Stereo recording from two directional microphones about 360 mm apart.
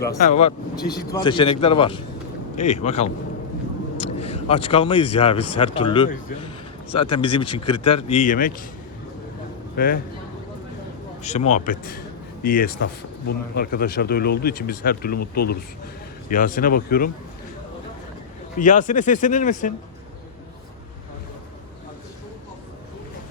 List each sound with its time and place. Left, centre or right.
0.2 s speech: centre
9.7 s speech: left
11.2 s a man's voice: centre
16.3 s speech: left
18.6 s speech: left